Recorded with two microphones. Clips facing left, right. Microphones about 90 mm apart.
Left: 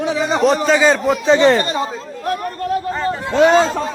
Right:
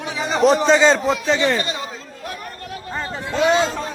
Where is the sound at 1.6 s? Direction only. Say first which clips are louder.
Left 6 dB; 40° left (ahead or behind).